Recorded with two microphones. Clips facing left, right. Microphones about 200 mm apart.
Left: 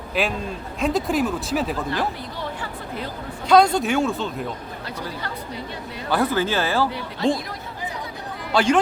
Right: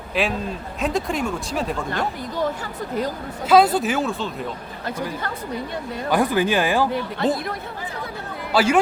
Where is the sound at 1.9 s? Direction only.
45° right (ahead or behind).